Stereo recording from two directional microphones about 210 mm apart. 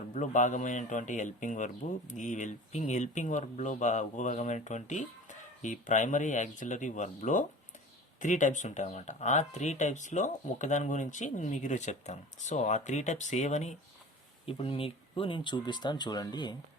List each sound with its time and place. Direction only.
0.1 s speech: 35° left (ahead or behind); by 16.6 s 20° left (ahead or behind)